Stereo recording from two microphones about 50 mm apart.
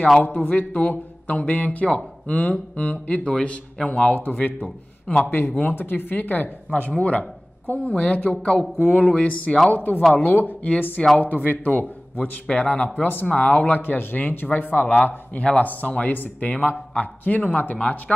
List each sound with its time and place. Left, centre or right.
0.2 s a man's voice: left; by 4.0 s centre
4.0 s a man's voice: left
7.0 s speech: left
9.7 s a man's voice: left
13.3 s speech: left
13.7 s a man's voice: left